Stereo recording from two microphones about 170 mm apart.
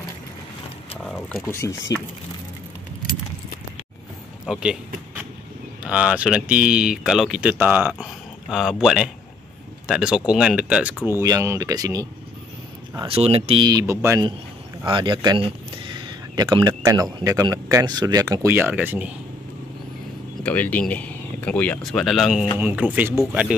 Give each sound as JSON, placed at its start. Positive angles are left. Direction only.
{"t": 1.0, "sound": "speech", "side_deg": 10}
{"t": 1.7, "sound": "speech", "side_deg": 90}
{"t": 4.5, "sound": "speech", "side_deg": -5}
{"t": 11.1, "sound": "speech", "side_deg": -15}
{"t": 12.9, "sound": "speech", "side_deg": -30}
{"t": 13.7, "sound": "speech", "side_deg": -20}
{"t": 14.9, "sound": "speech", "side_deg": -30}
{"t": 20.4, "sound": "speech", "side_deg": 10}